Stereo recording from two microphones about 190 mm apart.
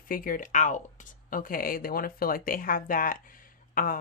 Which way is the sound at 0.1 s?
45° left (ahead or behind).